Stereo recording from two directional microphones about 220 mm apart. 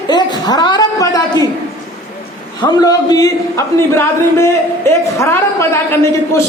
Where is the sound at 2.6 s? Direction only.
15° left (ahead or behind).